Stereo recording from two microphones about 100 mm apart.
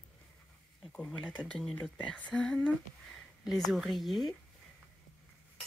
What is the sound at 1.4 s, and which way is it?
Speech, 10° left (ahead or behind).